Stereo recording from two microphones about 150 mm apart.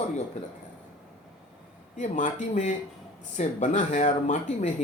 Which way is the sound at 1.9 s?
50° left (ahead or behind).